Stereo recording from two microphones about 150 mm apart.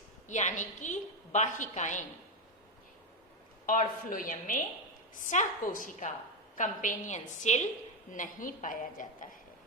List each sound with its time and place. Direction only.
0.3 s a woman's voice: 55° left (ahead or behind)
3.7 s a woman's voice: 65° left (ahead or behind)